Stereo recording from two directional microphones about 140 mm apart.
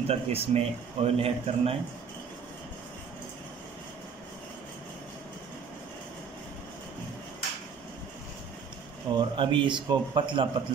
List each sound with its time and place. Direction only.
0.1 s speech: 45° right (ahead or behind)
9.1 s a man's voice: 25° right (ahead or behind)